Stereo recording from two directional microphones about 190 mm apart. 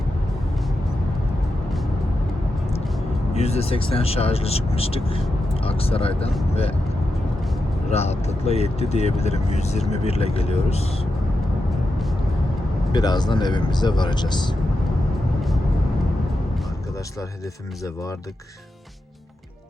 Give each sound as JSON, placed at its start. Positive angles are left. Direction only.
{"t": 3.3, "sound": "speech", "side_deg": 35}
{"t": 7.9, "sound": "speech", "side_deg": 35}
{"t": 12.9, "sound": "speech", "side_deg": 20}